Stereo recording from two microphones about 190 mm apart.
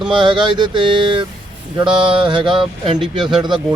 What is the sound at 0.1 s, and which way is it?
Speech, 25° right (ahead or behind).